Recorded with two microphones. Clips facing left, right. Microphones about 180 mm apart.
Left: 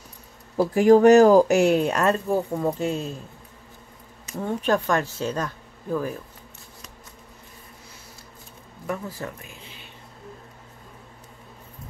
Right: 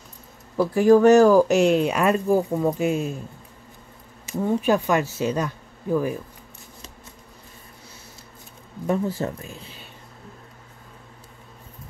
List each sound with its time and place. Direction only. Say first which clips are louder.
0.6 s speech: even; 20° left (ahead or behind)
1.6 s a woman's voice: right 1 dB; 5° left (ahead or behind)
4.4 s a woman's voice: right 3 dB; 10° right (ahead or behind)
8.8 s speech: right 7 dB; 25° right (ahead or behind)